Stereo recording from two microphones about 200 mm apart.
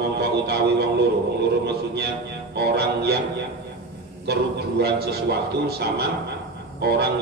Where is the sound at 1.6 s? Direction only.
55° right (ahead or behind).